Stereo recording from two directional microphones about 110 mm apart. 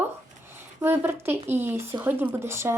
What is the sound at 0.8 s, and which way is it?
Speech, 20° right (ahead or behind).